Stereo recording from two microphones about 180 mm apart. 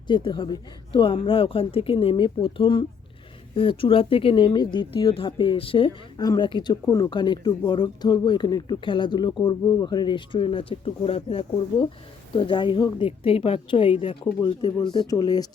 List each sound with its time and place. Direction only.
0.1 s speech: 25° left (ahead or behind)